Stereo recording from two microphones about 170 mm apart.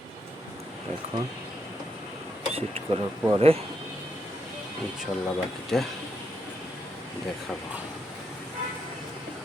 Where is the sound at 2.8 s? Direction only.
35° right (ahead or behind).